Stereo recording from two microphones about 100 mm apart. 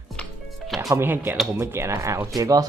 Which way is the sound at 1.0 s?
20° right (ahead or behind).